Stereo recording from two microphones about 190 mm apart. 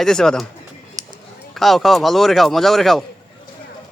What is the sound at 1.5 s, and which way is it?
A man's voice, centre (ahead or behind).